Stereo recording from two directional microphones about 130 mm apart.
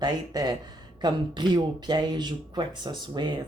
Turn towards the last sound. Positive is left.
turn(degrees=-35)  # may be behind; listen again after turning